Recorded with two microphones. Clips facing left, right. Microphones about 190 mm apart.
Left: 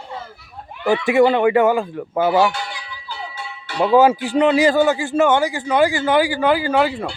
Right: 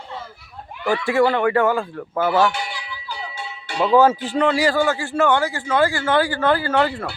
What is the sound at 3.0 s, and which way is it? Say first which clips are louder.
Music: left 1 dB; 20° right (ahead or behind).